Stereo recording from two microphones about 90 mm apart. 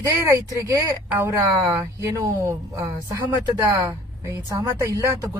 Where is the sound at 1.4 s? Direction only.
35° right (ahead or behind).